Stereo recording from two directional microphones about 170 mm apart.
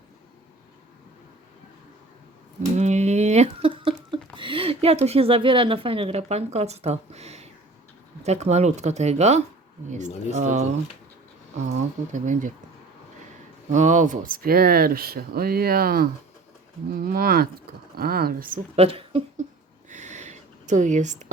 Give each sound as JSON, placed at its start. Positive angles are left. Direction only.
{"t": 2.7, "sound": "a sound", "side_deg": -40}
{"t": 8.2, "sound": "speech", "side_deg": -40}
{"t": 10.5, "sound": "speech", "side_deg": -45}
{"t": 13.7, "sound": "speech", "side_deg": -45}
{"t": 18.8, "sound": "speech", "side_deg": -35}
{"t": 19.9, "sound": "a sound", "side_deg": -45}